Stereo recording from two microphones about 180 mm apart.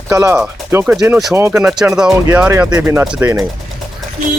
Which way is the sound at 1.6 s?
5° right (ahead or behind).